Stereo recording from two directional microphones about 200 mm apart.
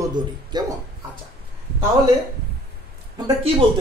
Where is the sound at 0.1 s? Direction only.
20° right (ahead or behind).